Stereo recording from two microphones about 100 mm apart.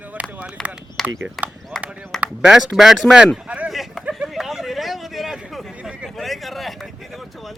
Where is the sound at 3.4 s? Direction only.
15° right (ahead or behind).